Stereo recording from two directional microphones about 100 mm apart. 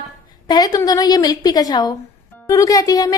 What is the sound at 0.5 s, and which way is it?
Speech, 40° left (ahead or behind).